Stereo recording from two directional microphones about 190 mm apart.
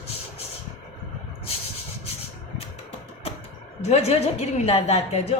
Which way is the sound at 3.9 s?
35° left (ahead or behind).